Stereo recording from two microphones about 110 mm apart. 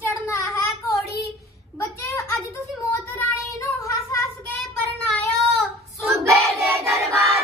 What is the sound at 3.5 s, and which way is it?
Child singing, 30° left (ahead or behind).